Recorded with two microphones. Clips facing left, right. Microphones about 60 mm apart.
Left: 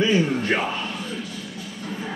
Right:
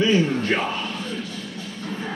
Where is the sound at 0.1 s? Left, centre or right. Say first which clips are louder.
Right 1 dB; left.